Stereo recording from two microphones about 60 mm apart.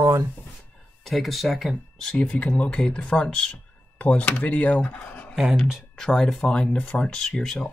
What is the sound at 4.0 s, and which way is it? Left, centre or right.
Speech, left.